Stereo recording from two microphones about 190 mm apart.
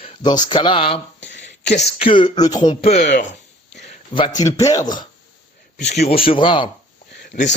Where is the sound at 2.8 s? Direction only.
40° left (ahead or behind).